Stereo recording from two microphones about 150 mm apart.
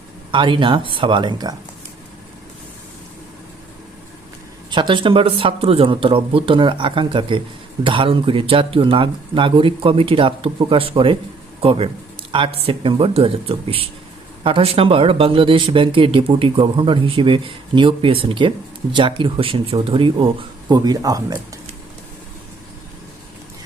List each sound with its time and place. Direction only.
0.3 s speech: 35° right (ahead or behind)
4.7 s speech: 35° right (ahead or behind)